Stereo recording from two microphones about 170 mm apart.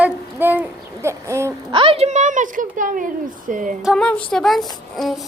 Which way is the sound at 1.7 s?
35° right (ahead or behind).